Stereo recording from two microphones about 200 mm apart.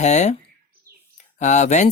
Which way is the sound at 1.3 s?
35° left (ahead or behind).